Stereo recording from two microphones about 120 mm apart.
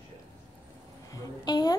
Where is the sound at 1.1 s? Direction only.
30° left (ahead or behind).